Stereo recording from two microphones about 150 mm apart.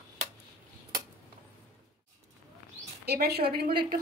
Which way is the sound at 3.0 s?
90° right.